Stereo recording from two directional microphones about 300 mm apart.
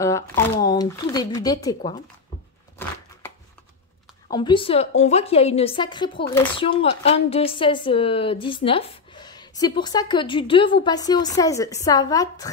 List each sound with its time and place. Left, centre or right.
0.0 s a woman's voice: centre
4.3 s a woman's voice: centre